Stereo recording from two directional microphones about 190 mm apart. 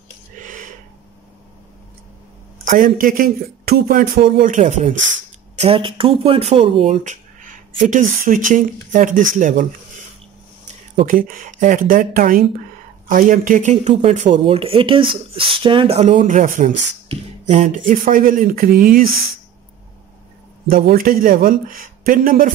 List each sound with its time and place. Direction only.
0.4 s a sound: 45° right (ahead or behind)
2.6 s a man's voice: 45° right (ahead or behind)
5.6 s a man's voice: 30° right (ahead or behind)
11.0 s a man's voice: 45° right (ahead or behind)
20.6 s a man's voice: 50° right (ahead or behind)